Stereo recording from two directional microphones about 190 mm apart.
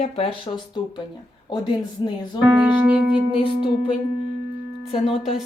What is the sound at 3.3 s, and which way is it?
Music, 25° left (ahead or behind).